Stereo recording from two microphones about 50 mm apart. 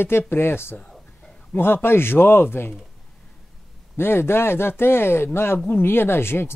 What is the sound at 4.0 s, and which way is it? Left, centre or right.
Speech, left.